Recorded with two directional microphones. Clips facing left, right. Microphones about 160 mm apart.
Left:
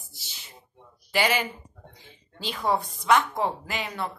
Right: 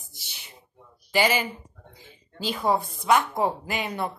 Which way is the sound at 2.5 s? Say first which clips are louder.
Right 2 dB; 5° right (ahead or behind).